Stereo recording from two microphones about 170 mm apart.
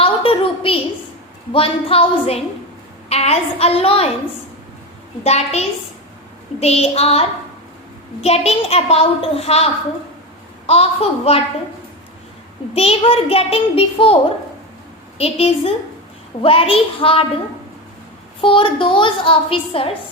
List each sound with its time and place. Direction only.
0.0 s a sound: 35° left (ahead or behind)
1.5 s a woman's voice: 35° left (ahead or behind)
5.2 s a woman's voice: 40° left (ahead or behind)
10.7 s a woman's voice: 35° left (ahead or behind)
12.7 s a woman's voice: 35° left (ahead or behind)
15.2 s a woman's voice: 35° left (ahead or behind)
18.3 s a woman's voice: 30° left (ahead or behind)